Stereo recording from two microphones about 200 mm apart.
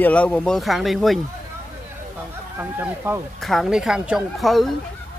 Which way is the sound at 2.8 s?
10° right (ahead or behind).